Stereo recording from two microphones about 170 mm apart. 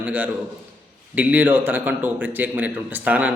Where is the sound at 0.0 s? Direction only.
10° right (ahead or behind).